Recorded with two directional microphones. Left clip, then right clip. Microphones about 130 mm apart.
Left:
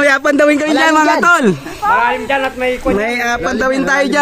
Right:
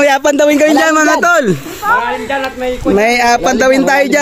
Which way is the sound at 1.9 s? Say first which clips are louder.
Left 1 dB; centre (ahead or behind).